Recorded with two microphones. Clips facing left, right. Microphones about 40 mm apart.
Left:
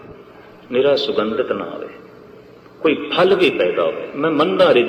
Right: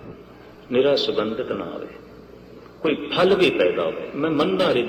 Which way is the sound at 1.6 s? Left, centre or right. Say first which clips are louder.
Left 4 dB; left.